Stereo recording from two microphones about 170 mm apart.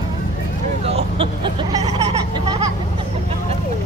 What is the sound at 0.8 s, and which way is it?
Vehicle, 35° right (ahead or behind).